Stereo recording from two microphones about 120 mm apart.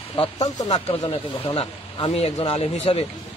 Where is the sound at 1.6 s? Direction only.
55° left (ahead or behind).